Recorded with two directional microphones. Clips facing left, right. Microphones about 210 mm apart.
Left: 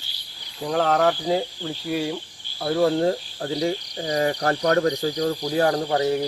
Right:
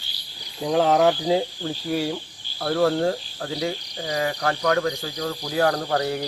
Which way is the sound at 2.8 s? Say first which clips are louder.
Left 1 dB; 20° left (ahead or behind).